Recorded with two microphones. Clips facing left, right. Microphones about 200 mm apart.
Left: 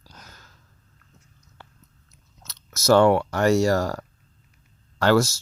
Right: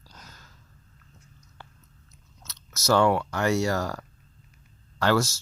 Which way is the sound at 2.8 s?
55° left (ahead or behind).